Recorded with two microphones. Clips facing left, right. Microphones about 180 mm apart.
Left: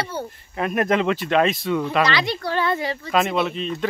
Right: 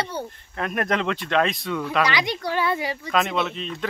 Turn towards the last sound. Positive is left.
turn(degrees=0)  # may be behind; listen again after turning